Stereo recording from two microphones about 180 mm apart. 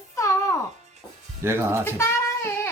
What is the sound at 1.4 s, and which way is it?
Speech, 15° right (ahead or behind).